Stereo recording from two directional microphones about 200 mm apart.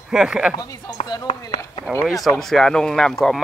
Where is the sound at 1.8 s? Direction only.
Centre (ahead or behind).